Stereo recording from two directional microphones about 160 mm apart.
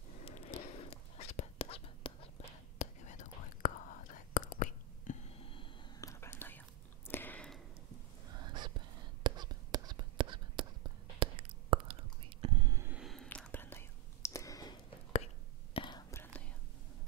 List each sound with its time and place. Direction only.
0.2 s whispering: 35° left (ahead or behind)
2.8 s whispering: 50° left (ahead or behind)
5.4 s a sound: 35° left (ahead or behind)
5.9 s whispering: 20° left (ahead or behind)
7.1 s a sound: 10° left (ahead or behind)
8.4 s a sound: 30° right (ahead or behind)
11.1 s whispering: 35° right (ahead or behind)
12.8 s whispering: 5° right (ahead or behind); by 16.0 s 30° left (ahead or behind)
16.1 s whispering: 10° left (ahead or behind)